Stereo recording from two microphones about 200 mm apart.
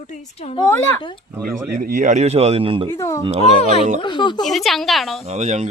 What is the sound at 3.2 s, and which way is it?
Speech, 30° right (ahead or behind).